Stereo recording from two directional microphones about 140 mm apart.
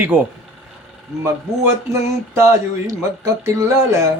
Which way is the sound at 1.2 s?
20° right (ahead or behind).